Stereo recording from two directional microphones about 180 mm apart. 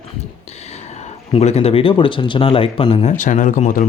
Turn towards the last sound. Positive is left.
turn(degrees=45)  # may be behind; listen again after turning